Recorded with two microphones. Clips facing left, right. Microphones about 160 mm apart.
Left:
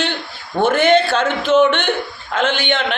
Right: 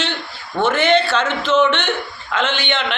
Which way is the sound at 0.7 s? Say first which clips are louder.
Left 2 dB; 50° left (ahead or behind).